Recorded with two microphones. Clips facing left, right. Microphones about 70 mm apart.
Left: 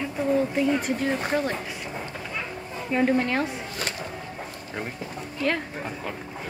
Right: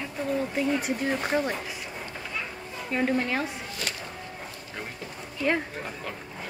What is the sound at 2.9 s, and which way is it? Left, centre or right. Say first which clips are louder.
Speech: left 4 dB; centre.